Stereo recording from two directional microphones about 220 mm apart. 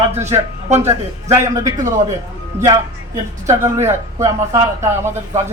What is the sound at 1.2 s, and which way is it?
A man's voice, 15° right (ahead or behind).